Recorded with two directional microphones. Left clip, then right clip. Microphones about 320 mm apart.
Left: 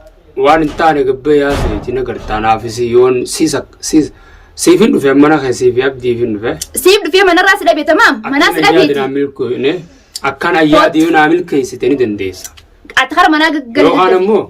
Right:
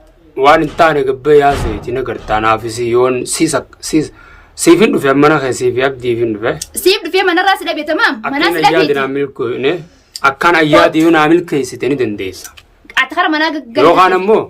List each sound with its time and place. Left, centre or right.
0.4 s a man's voice: centre
6.6 s a woman's voice: centre
9.0 s a man's voice: centre
13.0 s a woman's voice: centre
13.9 s a man's voice: centre